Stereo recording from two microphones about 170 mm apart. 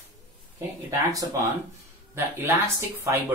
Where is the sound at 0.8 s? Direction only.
20° right (ahead or behind).